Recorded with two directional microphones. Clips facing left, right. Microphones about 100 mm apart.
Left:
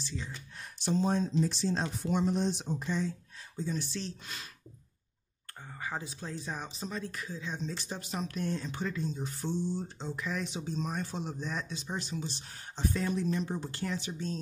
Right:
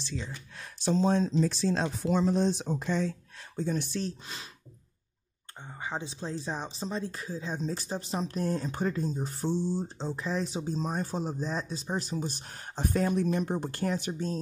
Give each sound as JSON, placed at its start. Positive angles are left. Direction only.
{"t": 0.0, "sound": "speech", "side_deg": -80}
{"t": 5.7, "sound": "speech", "side_deg": -20}